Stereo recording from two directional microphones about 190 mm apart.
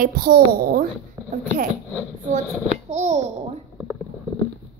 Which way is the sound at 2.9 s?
35° right (ahead or behind).